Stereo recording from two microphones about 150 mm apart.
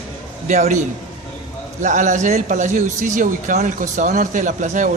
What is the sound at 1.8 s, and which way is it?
Speech, 55° right (ahead or behind).